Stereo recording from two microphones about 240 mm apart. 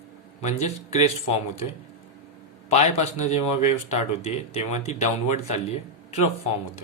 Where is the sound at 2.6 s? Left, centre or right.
Left.